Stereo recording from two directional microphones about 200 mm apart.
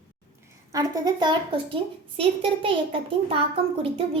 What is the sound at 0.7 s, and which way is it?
A woman's voice, 20° right (ahead or behind).